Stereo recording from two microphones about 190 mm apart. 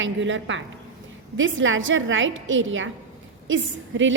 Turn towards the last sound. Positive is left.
turn(degrees=-80)